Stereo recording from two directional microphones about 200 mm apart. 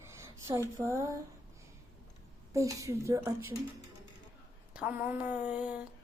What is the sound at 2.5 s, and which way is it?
Speech, 15° right (ahead or behind).